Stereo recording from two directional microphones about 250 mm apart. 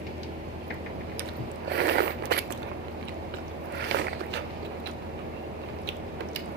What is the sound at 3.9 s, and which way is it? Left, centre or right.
Biting, right.